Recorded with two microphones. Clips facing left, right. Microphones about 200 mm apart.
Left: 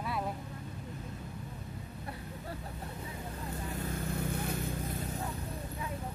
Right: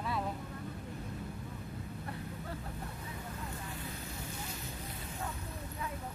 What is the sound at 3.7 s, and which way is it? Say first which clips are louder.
Vehicle: left 7 dB; 60° left (ahead or behind).